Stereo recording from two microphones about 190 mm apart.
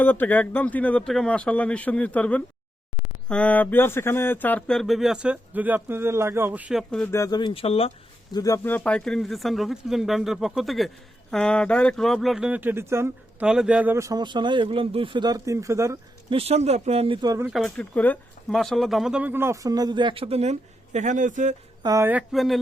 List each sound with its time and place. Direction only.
0.0 s speech: 10° left (ahead or behind); by 8.4 s 30° left (ahead or behind)
8.4 s speech: 15° left (ahead or behind); by 16.0 s 15° right (ahead or behind)
16.3 s speech: 30° right (ahead or behind)
17.4 s speech: centre (ahead or behind); by 21.5 s 40° right (ahead or behind)
21.8 s speech: 15° right (ahead or behind)
22.3 s speech: centre (ahead or behind)